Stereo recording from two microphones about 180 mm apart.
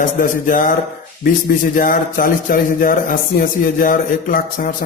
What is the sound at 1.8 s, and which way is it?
Speech, 50° left (ahead or behind).